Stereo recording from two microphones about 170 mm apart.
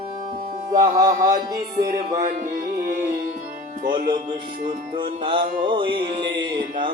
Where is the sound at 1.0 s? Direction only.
50° right (ahead or behind).